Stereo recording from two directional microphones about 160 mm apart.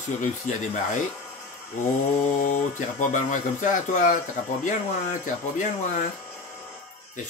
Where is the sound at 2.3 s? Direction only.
50° left (ahead or behind).